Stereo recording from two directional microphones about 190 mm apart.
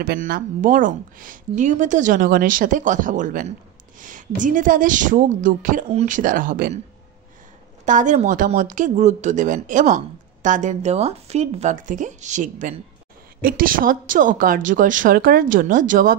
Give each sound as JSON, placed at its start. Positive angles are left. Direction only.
{"t": 0.0, "sound": "speech", "side_deg": -50}
{"t": 7.8, "sound": "speech", "side_deg": -40}